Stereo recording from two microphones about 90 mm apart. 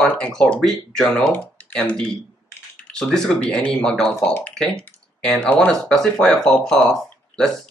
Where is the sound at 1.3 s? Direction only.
15° left (ahead or behind).